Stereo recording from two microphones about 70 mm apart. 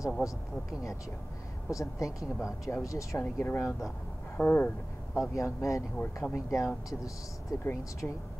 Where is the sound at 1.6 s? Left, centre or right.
Left.